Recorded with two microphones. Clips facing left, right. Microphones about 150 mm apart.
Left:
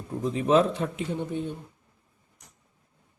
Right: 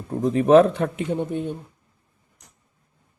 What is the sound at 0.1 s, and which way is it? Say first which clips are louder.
Speech: right 7 dB; 55° right (ahead or behind).